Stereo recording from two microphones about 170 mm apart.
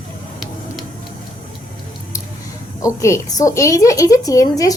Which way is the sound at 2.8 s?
20° left (ahead or behind).